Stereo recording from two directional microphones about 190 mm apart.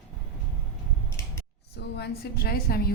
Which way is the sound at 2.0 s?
55° left (ahead or behind).